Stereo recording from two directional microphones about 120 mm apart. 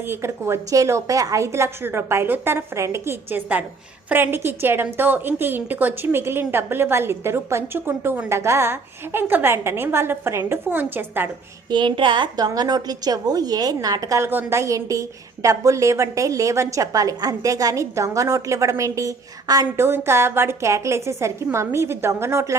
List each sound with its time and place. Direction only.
0.1 s a woman's voice: 20° right (ahead or behind)
11.7 s a woman's voice: 40° right (ahead or behind); by 22.5 s 20° right (ahead or behind)